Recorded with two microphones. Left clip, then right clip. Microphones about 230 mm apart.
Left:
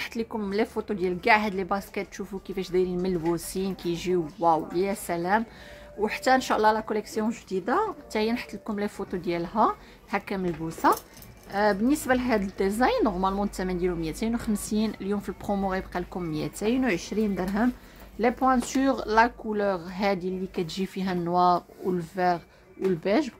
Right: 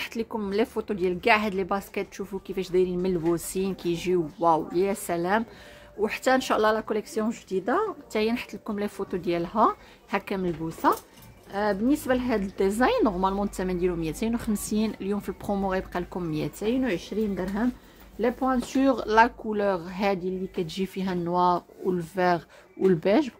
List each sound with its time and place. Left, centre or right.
0.0 s a woman's voice: centre
16.6 s a woman's voice: centre